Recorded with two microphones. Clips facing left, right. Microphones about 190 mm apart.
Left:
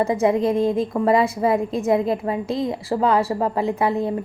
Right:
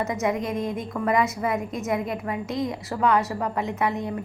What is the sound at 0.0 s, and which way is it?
A woman's voice, 30° left (ahead or behind).